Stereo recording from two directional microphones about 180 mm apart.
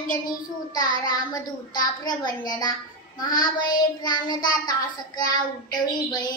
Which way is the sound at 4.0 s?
25° left (ahead or behind).